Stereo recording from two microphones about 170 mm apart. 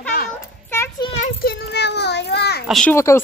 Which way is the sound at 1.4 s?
70° left (ahead or behind).